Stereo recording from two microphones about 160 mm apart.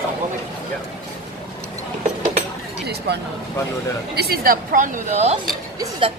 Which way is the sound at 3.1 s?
90° right.